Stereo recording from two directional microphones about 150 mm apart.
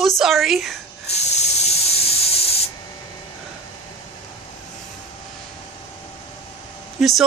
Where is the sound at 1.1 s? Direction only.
45° left (ahead or behind).